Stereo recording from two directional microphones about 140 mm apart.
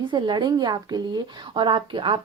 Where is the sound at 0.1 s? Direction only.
30° right (ahead or behind).